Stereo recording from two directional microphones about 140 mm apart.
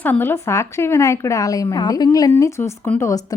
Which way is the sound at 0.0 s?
15° left (ahead or behind).